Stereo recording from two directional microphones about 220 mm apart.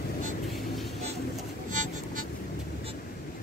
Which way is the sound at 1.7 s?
35° right (ahead or behind).